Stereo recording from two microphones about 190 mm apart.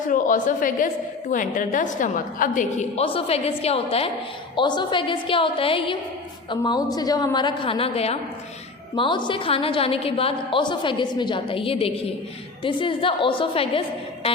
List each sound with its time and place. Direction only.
0.1 s a woman's voice: 45° left (ahead or behind)